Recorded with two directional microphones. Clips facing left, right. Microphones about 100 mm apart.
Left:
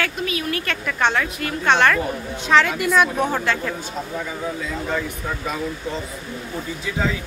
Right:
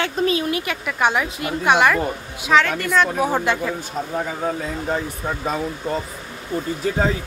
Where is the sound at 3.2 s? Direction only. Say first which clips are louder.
Right 2 dB; 15° right (ahead or behind).